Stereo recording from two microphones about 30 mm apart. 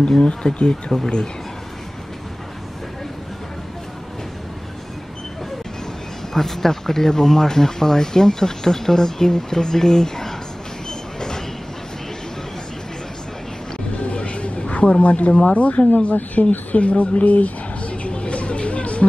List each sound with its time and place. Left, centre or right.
0.2 s speech: left
6.3 s speech: centre
11.1 s vehicle: left
14.0 s a sound: left
15.0 s speech: left
16.3 s a sound: left